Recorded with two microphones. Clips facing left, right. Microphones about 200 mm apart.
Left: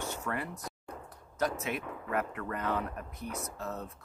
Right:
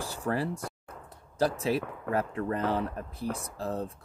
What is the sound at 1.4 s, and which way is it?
Speech, 30° right (ahead or behind).